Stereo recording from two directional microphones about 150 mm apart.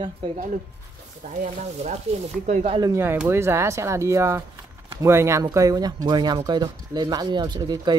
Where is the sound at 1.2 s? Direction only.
50° right (ahead or behind).